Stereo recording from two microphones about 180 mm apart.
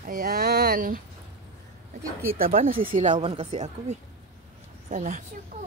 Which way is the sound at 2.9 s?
40° right (ahead or behind).